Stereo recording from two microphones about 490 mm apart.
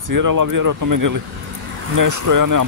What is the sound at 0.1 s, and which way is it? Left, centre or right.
Speech, right.